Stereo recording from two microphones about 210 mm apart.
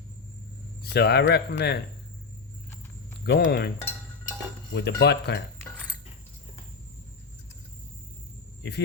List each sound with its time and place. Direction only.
0.8 s speech: 50° left (ahead or behind)
3.2 s speech: 50° left (ahead or behind)
4.7 s speech: 55° left (ahead or behind)